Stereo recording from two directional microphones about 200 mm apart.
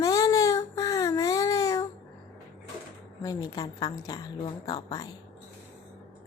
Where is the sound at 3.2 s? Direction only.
20° left (ahead or behind).